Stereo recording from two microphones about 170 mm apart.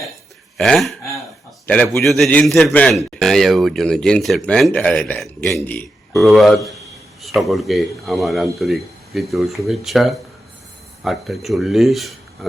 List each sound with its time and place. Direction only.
0.5 s a man's voice: centre (ahead or behind)